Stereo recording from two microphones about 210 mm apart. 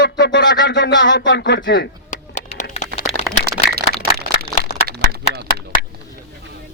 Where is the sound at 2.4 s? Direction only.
35° left (ahead or behind).